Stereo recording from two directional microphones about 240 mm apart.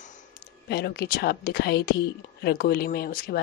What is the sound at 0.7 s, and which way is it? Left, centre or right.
Speech, left.